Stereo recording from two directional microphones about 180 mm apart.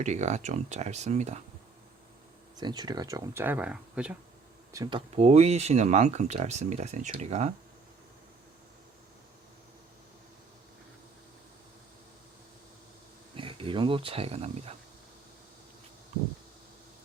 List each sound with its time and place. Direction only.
0.0 s speech: 40° right (ahead or behind)
2.6 s speech: 20° right (ahead or behind); by 4.2 s 5° right (ahead or behind)
4.7 s speech: 20° right (ahead or behind); by 7.5 s 40° right (ahead or behind)
13.3 s speech: 30° right (ahead or behind)